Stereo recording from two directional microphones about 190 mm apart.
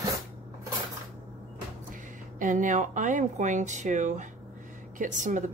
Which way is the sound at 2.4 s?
40° right (ahead or behind).